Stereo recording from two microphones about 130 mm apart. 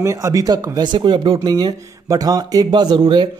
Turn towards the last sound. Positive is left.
turn(degrees=-35)  # may be behind; listen again after turning